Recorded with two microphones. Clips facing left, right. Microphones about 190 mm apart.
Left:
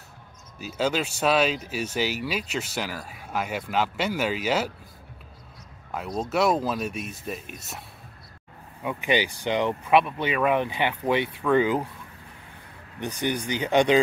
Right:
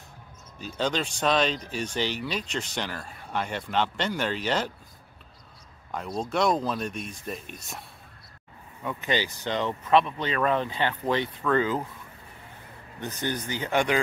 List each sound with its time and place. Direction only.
0.6 s speech: 5° left (ahead or behind)
5.9 s speech: 5° left (ahead or behind)
8.8 s speech: 15° left (ahead or behind)
13.0 s speech: 15° left (ahead or behind)